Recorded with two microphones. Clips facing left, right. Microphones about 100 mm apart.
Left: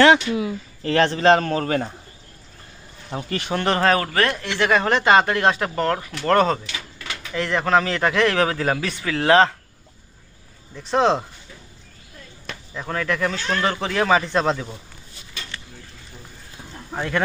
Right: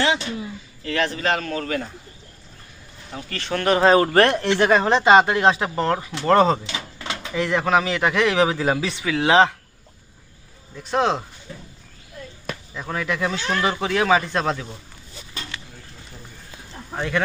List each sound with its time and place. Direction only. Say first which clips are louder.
0.8 s a man's voice: left 5 dB; 35° left (ahead or behind)
3.1 s a man's voice: left 5 dB; 30° left (ahead or behind)
3.3 s speech: left 1 dB; 15° left (ahead or behind)
3.6 s a man's voice: right 3 dB; 5° right (ahead or behind)
3.8 s speech: right 6 dB; 25° right (ahead or behind)
4.1 s speech: right 5 dB; 40° right (ahead or behind)
4.4 s speech: right 2 dB; 25° right (ahead or behind)
7.4 s a man's voice: left 1 dB; 10° right (ahead or behind)
10.8 s speech: left 2 dB; centre (ahead or behind)
12.5 s basketball bounce: even; 5° right (ahead or behind)
13.0 s speech: left 1 dB; 10° right (ahead or behind)
17.0 s speech: even; 5° left (ahead or behind)